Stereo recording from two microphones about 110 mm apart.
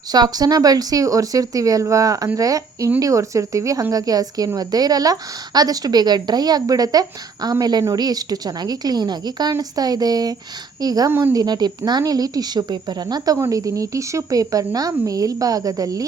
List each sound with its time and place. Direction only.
0.1 s speech: 35° right (ahead or behind)